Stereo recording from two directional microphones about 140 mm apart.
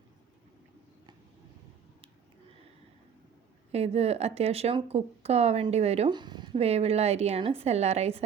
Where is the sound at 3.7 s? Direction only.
45° right (ahead or behind).